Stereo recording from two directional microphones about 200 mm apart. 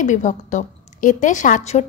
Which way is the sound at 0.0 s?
40° left (ahead or behind).